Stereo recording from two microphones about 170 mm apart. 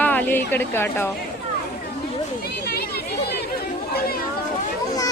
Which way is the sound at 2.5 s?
65° left (ahead or behind).